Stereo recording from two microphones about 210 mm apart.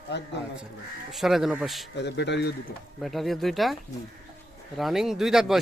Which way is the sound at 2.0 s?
55° left (ahead or behind).